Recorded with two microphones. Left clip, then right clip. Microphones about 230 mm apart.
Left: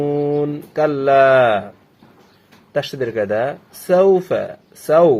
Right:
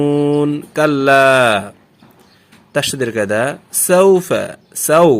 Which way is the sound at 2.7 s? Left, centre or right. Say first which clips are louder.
Right 3 dB; right.